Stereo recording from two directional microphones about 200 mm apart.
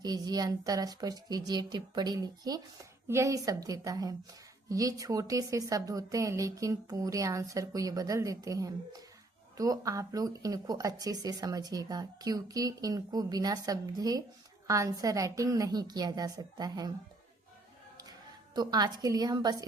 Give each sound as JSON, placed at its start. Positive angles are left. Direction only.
{"t": 0.0, "sound": "a woman's voice", "side_deg": -20}
{"t": 18.5, "sound": "speech", "side_deg": -20}